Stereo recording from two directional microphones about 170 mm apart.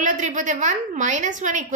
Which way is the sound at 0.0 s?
45° right (ahead or behind).